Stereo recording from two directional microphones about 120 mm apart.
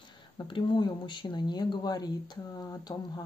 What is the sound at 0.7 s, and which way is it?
Speech, 40° left (ahead or behind).